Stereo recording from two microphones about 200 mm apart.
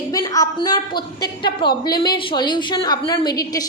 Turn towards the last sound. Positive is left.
turn(degrees=20)  # may be behind; listen again after turning